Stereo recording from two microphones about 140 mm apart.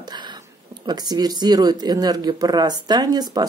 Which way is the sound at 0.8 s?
30° right (ahead or behind).